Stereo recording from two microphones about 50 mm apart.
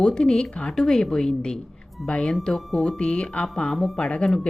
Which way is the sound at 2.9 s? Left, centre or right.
Centre.